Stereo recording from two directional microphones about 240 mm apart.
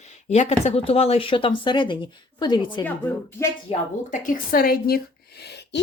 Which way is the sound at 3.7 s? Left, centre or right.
Left.